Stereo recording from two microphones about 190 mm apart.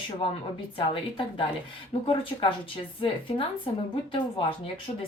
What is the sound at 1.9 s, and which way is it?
A woman's voice, 30° left (ahead or behind).